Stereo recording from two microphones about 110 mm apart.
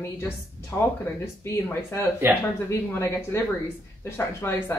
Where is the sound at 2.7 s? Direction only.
25° left (ahead or behind).